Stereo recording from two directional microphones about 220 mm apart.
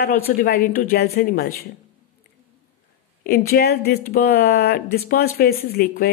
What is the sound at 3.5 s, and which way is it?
Speech, 45° left (ahead or behind).